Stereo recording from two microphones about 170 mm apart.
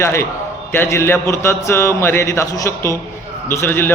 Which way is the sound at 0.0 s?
15° left (ahead or behind).